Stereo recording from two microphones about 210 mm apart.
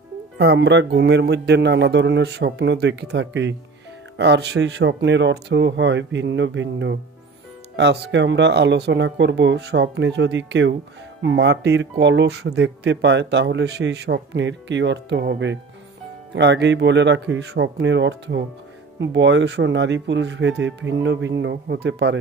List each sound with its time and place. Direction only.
0.4 s speech: 55° right (ahead or behind)